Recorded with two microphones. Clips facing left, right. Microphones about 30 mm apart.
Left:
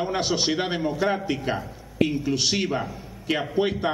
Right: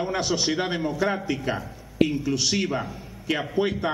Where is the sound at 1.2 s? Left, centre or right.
Left.